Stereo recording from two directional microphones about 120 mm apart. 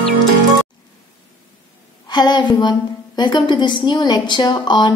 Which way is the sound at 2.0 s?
35° left (ahead or behind).